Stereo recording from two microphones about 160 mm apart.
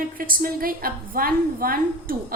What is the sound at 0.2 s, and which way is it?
A woman's voice, 65° right (ahead or behind).